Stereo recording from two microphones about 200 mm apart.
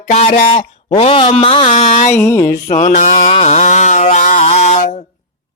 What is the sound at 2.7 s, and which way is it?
Chainsaw, 35° left (ahead or behind).